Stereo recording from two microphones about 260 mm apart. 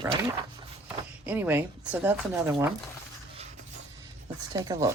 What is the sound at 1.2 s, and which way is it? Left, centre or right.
Speech, centre.